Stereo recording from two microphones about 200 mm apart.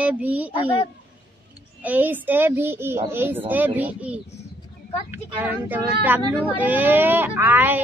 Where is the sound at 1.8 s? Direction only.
10° right (ahead or behind).